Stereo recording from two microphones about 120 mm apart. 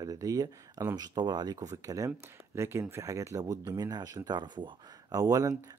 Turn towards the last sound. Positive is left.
turn(degrees=-30)  # may be behind; listen again after turning